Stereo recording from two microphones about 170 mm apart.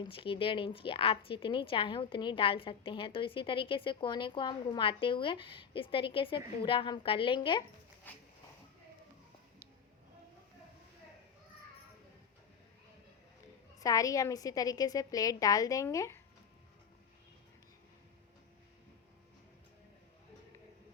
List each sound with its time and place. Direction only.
0.0 s a woman's voice: 30° left (ahead or behind)
8.1 s speech: 10° left (ahead or behind)
13.7 s a woman's voice: 20° left (ahead or behind)